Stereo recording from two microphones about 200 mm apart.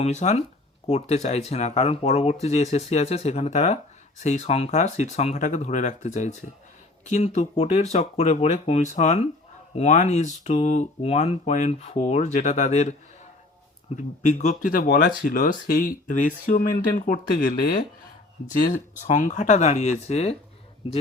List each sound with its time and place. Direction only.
0.0 s speech: 35° left (ahead or behind)